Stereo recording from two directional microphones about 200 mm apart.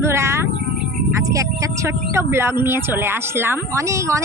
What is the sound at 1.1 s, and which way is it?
Speech, 15° right (ahead or behind).